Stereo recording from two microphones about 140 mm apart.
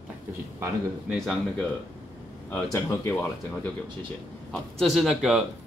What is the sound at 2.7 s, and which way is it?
Speech, 20° left (ahead or behind).